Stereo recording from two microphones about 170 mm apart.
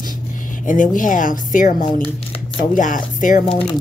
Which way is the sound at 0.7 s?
50° left (ahead or behind).